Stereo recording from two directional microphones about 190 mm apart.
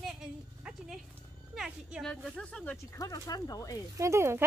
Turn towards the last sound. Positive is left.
turn(degrees=-15)  # may be behind; listen again after turning